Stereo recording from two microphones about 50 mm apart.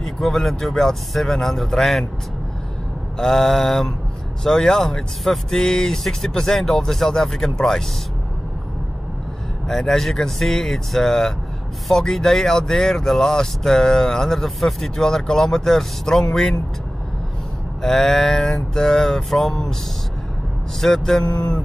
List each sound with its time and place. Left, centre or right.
0.0 s speech: centre
3.2 s speech: centre
9.7 s speech: centre
17.8 s speech: centre
20.8 s speech: centre